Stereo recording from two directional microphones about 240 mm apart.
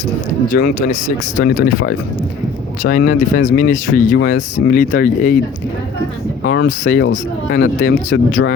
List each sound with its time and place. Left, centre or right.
0.6 s speech: left
2.8 s speech: left
6.5 s speech: left